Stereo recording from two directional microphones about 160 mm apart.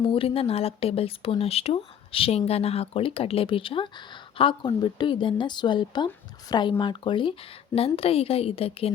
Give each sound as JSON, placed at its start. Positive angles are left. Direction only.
{"t": 0.0, "sound": "a woman's voice", "side_deg": 35}